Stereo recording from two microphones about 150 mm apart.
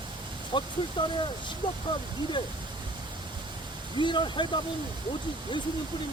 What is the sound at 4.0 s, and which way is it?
Speech, 30° left (ahead or behind).